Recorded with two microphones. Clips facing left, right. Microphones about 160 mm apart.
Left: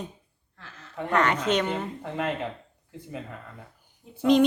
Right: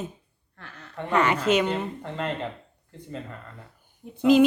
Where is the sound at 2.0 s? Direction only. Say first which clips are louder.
Left 1 dB; 5° left (ahead or behind).